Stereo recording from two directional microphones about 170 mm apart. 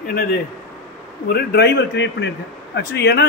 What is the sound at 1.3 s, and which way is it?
Speech, 75° left (ahead or behind).